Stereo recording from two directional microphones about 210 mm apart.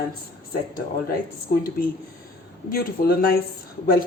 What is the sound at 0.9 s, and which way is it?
Speech, 45° left (ahead or behind).